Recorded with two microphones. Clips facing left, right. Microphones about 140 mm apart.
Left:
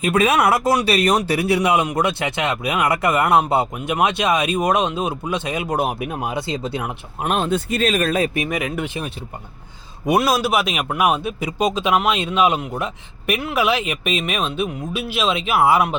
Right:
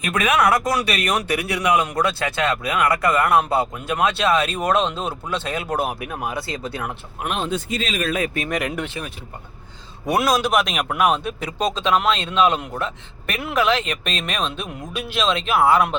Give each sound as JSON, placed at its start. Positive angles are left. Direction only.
{"t": 0.0, "sound": "a man's voice", "side_deg": 30}
{"t": 7.3, "sound": "speech", "side_deg": 50}
{"t": 8.4, "sound": "a man's voice", "side_deg": 5}
{"t": 10.2, "sound": "a man's voice", "side_deg": 5}